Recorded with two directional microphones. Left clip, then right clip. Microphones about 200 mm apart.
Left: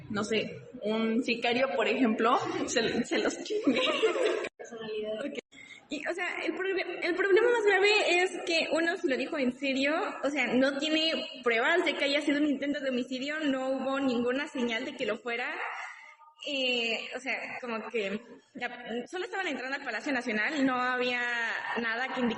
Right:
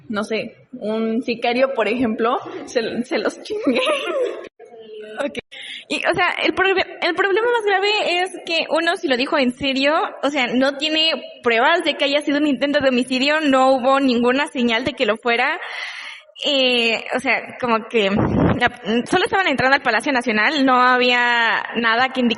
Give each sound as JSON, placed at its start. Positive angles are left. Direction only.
{"t": 0.1, "sound": "a woman's voice", "side_deg": -50}
{"t": 0.9, "sound": "a woman's voice", "side_deg": -35}
{"t": 2.1, "sound": "a woman's voice", "side_deg": -35}
{"t": 3.1, "sound": "a woman's voice", "side_deg": -50}
{"t": 5.9, "sound": "a woman's voice", "side_deg": -60}
{"t": 19.1, "sound": "a woman's voice", "side_deg": -55}